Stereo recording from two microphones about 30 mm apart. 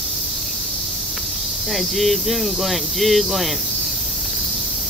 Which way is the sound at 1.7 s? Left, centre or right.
Centre.